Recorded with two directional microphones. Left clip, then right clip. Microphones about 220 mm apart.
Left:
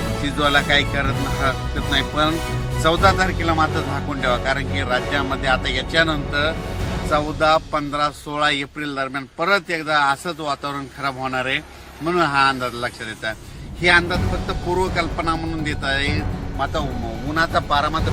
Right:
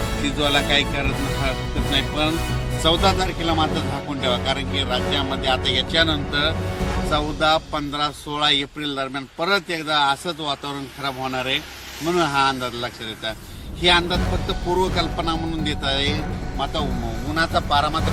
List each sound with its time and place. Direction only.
0.3 s speech: 10° right (ahead or behind); by 16.0 s 5° left (ahead or behind)
17.3 s speech: 5° left (ahead or behind)